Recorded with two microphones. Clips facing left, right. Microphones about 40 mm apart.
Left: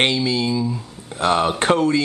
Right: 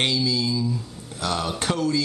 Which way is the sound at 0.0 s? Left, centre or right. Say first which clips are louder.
Left 4 dB; left.